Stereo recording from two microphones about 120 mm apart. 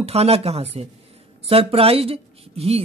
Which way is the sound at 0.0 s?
60° right (ahead or behind).